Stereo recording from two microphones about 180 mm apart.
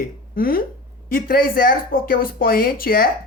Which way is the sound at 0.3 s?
55° left (ahead or behind).